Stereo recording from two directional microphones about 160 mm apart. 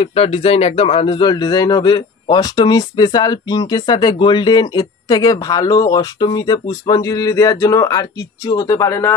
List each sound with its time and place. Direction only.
0.0 s speech: 40° left (ahead or behind); by 9.1 s 20° left (ahead or behind)